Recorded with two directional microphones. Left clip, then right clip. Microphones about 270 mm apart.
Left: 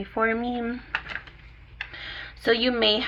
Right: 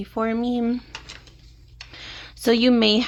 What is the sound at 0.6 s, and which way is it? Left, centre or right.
Speech, right.